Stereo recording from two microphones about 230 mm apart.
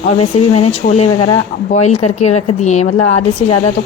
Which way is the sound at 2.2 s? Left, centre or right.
Left.